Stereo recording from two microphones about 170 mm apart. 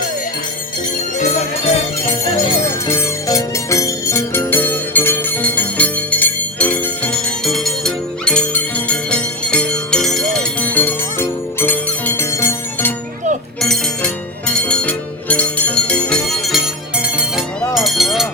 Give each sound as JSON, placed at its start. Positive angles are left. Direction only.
{"t": 1.2, "sound": "music", "side_deg": 40}
{"t": 2.8, "sound": "music", "side_deg": 20}
{"t": 13.6, "sound": "music", "side_deg": 5}
{"t": 17.6, "sound": "a sound", "side_deg": 0}